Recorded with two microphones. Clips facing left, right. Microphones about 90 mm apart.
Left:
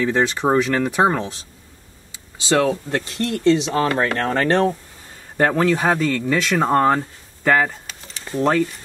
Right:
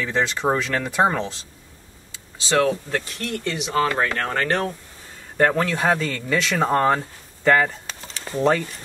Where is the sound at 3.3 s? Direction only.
25° left (ahead or behind).